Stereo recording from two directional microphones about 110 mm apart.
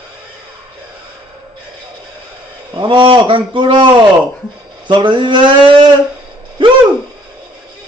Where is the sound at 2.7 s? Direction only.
50° right (ahead or behind).